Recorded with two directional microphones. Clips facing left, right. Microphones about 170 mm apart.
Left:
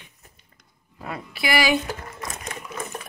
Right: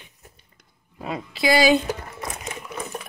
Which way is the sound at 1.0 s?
20° right (ahead or behind).